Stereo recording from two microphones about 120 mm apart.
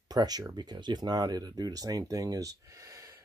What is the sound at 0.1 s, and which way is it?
Speech, 35° right (ahead or behind).